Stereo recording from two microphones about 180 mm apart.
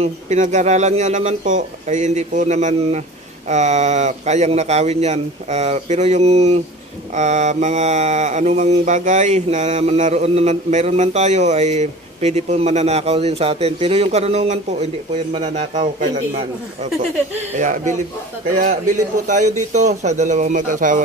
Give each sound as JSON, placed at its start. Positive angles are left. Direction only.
{"t": 0.0, "sound": "mantra", "side_deg": -40}
{"t": 17.6, "sound": "a man's voice", "side_deg": -45}